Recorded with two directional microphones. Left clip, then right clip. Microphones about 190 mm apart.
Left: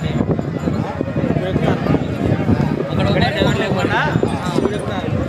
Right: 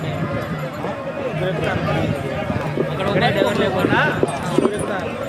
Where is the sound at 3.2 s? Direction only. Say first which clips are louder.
Even; 60° left (ahead or behind).